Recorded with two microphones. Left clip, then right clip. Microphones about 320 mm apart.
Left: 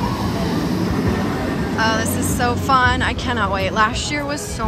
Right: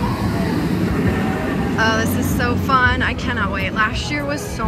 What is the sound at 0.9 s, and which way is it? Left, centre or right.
Music, left.